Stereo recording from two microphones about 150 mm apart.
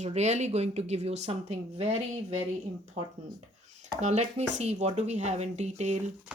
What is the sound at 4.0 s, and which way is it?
Speech, 50° right (ahead or behind).